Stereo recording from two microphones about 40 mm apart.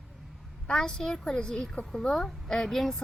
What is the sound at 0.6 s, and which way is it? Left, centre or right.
A woman's voice, centre.